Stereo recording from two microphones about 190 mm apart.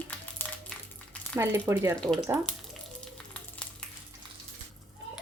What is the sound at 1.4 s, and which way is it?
Speech, 15° right (ahead or behind).